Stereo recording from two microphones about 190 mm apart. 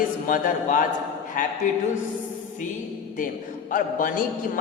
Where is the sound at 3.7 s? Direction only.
45° left (ahead or behind).